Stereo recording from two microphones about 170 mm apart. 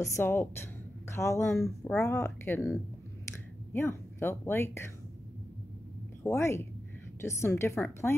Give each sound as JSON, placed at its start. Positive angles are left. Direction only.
{"t": 0.0, "sound": "speech", "side_deg": 15}
{"t": 3.7, "sound": "speech", "side_deg": 15}
{"t": 6.2, "sound": "speech", "side_deg": 15}